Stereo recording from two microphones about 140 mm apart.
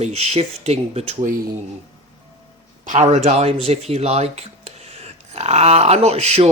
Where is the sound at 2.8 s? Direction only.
55° right (ahead or behind).